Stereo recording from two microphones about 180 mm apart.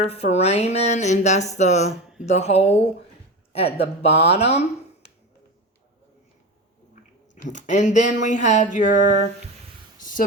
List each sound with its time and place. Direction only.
0.0 s speech: 35° left (ahead or behind)
7.4 s speech: 45° left (ahead or behind)
10.0 s a sound: 50° left (ahead or behind)